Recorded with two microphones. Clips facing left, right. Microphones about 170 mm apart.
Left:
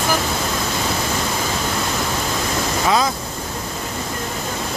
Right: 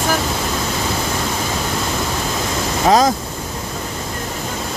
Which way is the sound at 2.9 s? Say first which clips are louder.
Right 6 dB; 40° right (ahead or behind).